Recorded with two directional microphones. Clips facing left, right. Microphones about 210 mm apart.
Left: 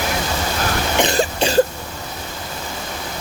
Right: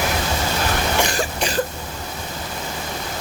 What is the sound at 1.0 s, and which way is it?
Cough, 25° left (ahead or behind).